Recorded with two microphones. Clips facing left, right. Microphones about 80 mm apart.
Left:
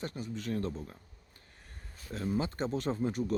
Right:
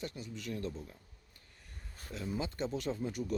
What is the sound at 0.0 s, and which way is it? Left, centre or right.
Speech, left.